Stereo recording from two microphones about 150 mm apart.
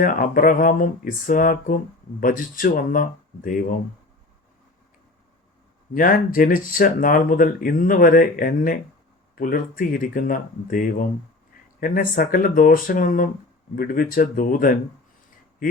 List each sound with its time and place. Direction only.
0.0 s speech: 65° left (ahead or behind)
5.9 s speech: 70° left (ahead or behind)